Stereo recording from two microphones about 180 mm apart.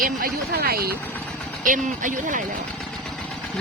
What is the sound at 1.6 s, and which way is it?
Speech, 45° right (ahead or behind).